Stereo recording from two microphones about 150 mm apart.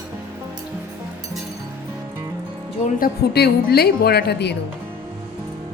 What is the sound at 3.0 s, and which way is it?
A woman's voice, 90° left.